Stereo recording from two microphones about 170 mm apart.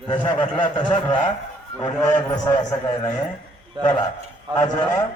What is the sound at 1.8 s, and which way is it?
Speech, 45° left (ahead or behind).